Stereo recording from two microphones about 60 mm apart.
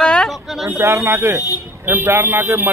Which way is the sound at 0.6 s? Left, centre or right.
Right.